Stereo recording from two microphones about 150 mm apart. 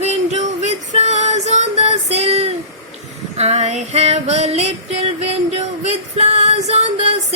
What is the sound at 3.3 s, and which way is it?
Female singing, 45° right (ahead or behind).